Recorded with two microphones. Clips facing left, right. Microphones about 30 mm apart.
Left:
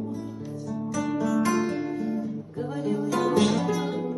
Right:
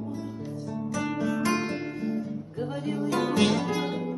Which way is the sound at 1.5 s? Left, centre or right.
Right.